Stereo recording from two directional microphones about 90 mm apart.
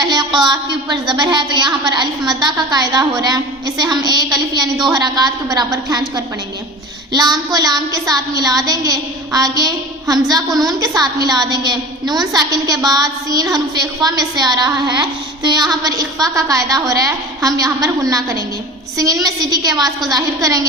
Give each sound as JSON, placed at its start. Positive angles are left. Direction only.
{"t": 0.0, "sound": "a sound", "side_deg": -55}
{"t": 0.4, "sound": "a woman's voice", "side_deg": -55}
{"t": 7.1, "sound": "a woman's voice", "side_deg": -50}